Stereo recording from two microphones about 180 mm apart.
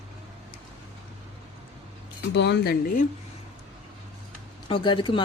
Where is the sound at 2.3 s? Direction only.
70° left (ahead or behind).